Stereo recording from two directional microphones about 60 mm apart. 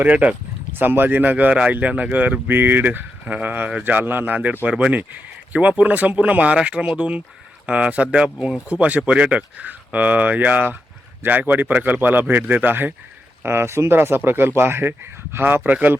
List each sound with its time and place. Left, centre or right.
0.0 s speech: right
0.7 s speech: right
13.4 s speech: right